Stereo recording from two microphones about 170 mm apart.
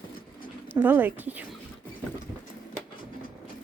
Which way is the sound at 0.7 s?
10° right (ahead or behind).